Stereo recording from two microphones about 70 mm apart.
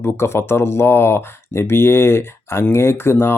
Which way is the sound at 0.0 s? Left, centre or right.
Left.